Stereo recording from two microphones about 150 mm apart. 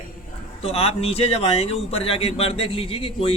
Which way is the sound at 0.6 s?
40° left (ahead or behind).